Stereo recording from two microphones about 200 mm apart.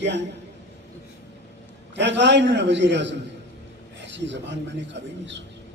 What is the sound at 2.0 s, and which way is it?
A man's voice, 60° right (ahead or behind).